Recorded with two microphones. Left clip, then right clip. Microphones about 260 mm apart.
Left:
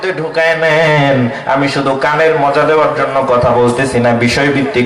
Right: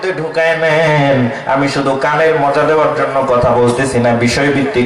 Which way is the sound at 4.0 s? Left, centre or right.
Centre.